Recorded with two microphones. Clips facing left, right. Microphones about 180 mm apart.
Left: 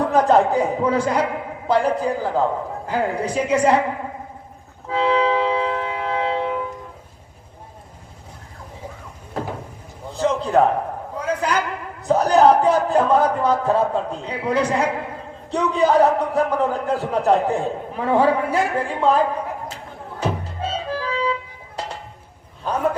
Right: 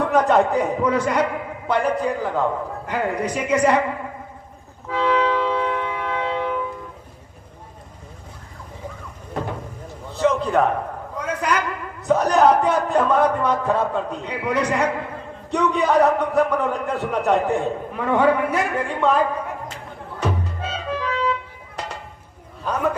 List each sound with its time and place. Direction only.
0.0 s a man's voice: 30° left (ahead or behind)
4.9 s a sound: 30° left (ahead or behind)
10.2 s a man's voice: 30° left (ahead or behind)
20.1 s music: 30° left (ahead or behind)
22.6 s a man's voice: 30° left (ahead or behind)